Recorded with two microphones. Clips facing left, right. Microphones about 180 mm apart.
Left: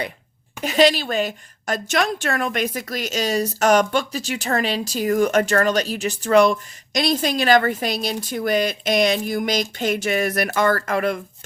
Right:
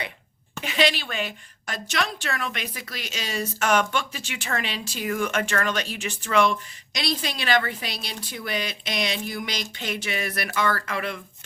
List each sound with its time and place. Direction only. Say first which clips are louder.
0.6 s a woman's voice: left 7 dB; 40° left (ahead or behind)